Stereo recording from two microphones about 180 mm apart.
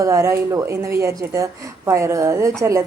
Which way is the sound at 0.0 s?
15° right (ahead or behind).